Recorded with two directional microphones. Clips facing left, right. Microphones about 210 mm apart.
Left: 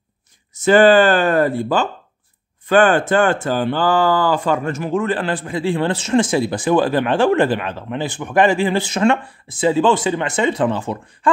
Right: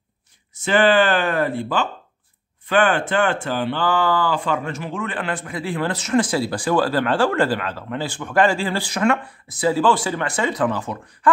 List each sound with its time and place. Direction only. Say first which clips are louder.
0.6 s speech: left 5 dB; 40° left (ahead or behind)